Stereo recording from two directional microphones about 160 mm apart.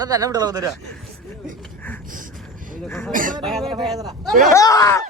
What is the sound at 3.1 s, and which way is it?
Speech, 55° right (ahead or behind).